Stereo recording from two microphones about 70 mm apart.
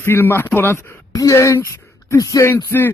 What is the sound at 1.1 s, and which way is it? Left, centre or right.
Speech, left.